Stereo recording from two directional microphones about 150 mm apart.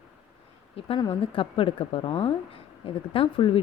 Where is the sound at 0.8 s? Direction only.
40° left (ahead or behind).